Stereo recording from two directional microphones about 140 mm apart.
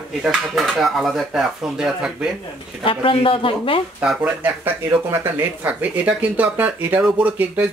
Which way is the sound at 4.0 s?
10° right (ahead or behind).